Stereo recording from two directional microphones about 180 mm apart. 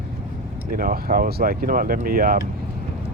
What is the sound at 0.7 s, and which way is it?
Speech, 55° right (ahead or behind).